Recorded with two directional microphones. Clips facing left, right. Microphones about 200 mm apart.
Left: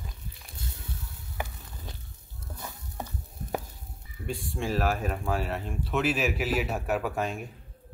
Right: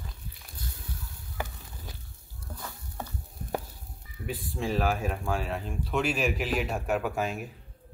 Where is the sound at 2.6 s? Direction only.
20° left (ahead or behind).